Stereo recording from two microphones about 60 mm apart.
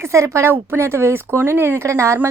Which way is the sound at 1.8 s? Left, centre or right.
Right.